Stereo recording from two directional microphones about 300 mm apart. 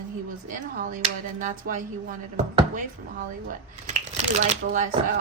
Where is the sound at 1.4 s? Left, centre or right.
Right.